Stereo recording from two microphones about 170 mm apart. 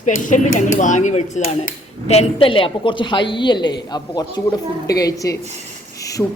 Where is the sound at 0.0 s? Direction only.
45° left (ahead or behind).